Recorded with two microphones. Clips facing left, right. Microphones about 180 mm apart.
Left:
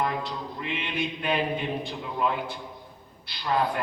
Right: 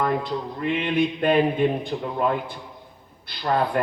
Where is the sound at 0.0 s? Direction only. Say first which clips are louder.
Right 5 dB; 50° right (ahead or behind).